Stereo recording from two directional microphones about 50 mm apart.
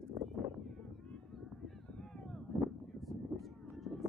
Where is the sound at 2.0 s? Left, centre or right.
Centre.